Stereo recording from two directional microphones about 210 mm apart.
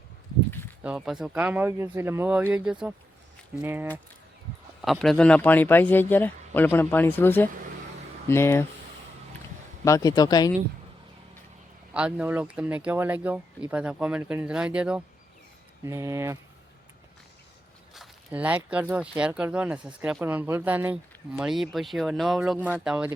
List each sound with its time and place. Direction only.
0.8 s speech: 5° right (ahead or behind); by 8.6 s 10° left (ahead or behind)
9.8 s speech: 15° left (ahead or behind)
11.9 s speech: 5° right (ahead or behind)
17.9 s speech: 5° right (ahead or behind)